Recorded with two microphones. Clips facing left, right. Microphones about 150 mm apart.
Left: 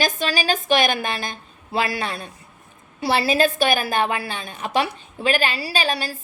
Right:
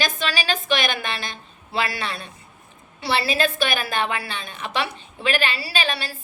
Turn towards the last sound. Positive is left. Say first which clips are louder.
# left 3 dB
turn(degrees=45)  # may be behind; listen again after turning